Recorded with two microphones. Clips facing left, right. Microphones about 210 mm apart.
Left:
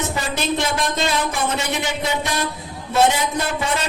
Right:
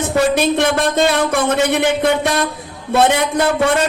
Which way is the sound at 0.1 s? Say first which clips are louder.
Right 9 dB; 60° right (ahead or behind).